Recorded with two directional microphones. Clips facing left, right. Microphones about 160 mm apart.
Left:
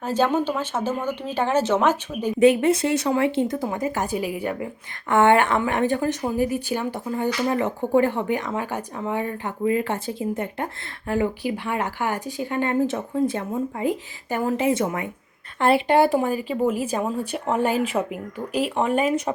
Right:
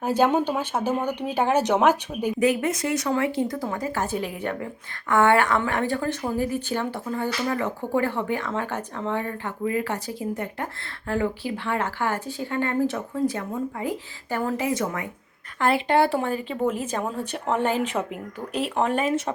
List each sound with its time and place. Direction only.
0.0 s speech: 10° right (ahead or behind)
2.4 s speech: 30° left (ahead or behind); by 4.7 s 10° left (ahead or behind)
5.0 s speech: 20° left (ahead or behind); by 19.3 s 5° left (ahead or behind)